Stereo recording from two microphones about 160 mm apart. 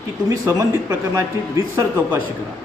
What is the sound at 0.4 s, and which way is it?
Speech, 15° right (ahead or behind).